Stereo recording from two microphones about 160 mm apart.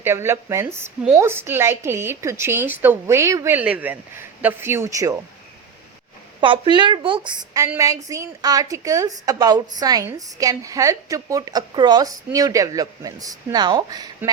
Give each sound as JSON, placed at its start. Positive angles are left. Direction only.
{"t": 0.0, "sound": "a woman's voice", "side_deg": -15}
{"t": 6.4, "sound": "a woman's voice", "side_deg": -30}